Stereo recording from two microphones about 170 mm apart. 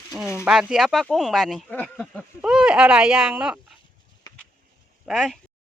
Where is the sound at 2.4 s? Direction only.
5° right (ahead or behind).